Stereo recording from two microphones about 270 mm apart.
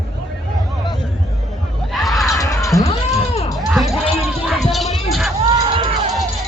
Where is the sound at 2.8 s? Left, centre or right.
Left.